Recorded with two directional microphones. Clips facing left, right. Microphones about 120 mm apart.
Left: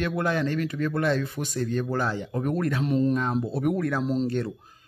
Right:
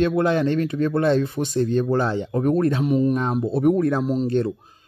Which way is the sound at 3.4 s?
25° right (ahead or behind).